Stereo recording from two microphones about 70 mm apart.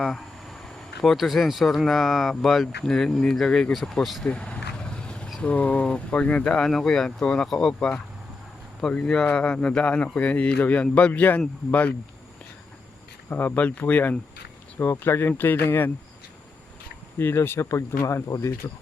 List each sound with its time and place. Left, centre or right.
0.0 s speech: centre
4.2 s vehicle: centre
5.4 s speech: centre
9.0 s speech: centre
13.3 s speech: left
14.8 s speech: left
17.2 s speech: left